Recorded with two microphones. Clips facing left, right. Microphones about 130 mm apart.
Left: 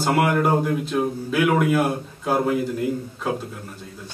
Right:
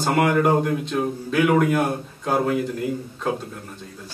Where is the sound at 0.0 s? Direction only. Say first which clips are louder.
Right 1 dB; 5° left (ahead or behind).